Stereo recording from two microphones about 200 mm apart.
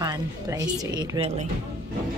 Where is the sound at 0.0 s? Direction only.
15° right (ahead or behind).